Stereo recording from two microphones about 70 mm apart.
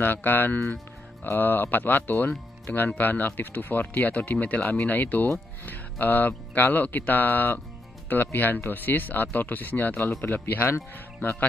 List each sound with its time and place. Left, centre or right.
0.0 s speech: left